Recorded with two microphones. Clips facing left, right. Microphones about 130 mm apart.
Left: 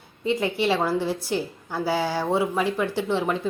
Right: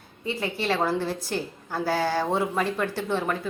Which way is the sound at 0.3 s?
20° left (ahead or behind).